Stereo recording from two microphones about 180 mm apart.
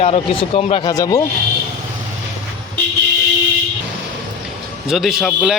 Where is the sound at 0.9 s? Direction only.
20° left (ahead or behind).